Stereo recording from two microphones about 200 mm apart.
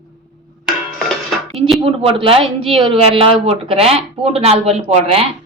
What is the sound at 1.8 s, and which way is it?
A woman's voice, 30° right (ahead or behind).